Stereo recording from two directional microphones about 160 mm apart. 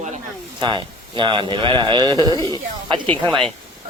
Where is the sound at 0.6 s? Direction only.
30° right (ahead or behind).